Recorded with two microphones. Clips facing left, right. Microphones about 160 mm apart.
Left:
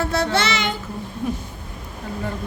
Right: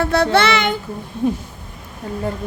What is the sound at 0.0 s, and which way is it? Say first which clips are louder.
Child singing: right 6 dB; 60° right (ahead or behind).